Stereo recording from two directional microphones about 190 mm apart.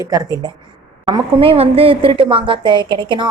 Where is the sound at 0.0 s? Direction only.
20° right (ahead or behind).